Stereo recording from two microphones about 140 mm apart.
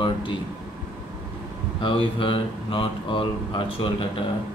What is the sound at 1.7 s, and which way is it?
Speech, 40° left (ahead or behind).